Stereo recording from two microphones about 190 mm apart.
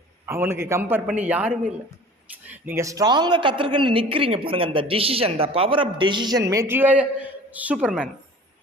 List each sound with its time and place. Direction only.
0.3 s a man's voice: 15° right (ahead or behind)